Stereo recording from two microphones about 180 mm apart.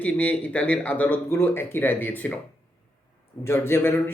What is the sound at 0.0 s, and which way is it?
Speech, 10° left (ahead or behind).